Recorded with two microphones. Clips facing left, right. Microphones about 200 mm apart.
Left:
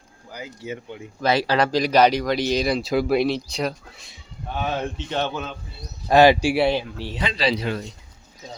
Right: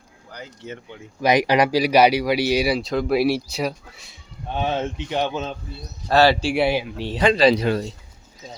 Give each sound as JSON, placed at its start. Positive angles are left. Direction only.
{"t": 0.3, "sound": "speech", "side_deg": 10}
{"t": 1.2, "sound": "speech", "side_deg": -15}
{"t": 2.8, "sound": "speech", "side_deg": 5}
{"t": 3.2, "sound": "speech", "side_deg": -10}
{"t": 4.8, "sound": "speech", "side_deg": -15}
{"t": 6.1, "sound": "speech", "side_deg": 15}
{"t": 6.6, "sound": "speech", "side_deg": -10}
{"t": 7.2, "sound": "speech", "side_deg": -50}